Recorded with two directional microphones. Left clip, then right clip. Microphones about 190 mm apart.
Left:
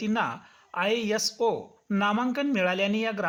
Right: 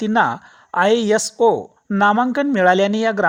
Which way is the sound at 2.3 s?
50° right (ahead or behind).